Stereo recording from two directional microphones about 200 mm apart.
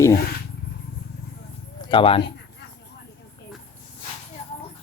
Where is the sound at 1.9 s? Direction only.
25° left (ahead or behind).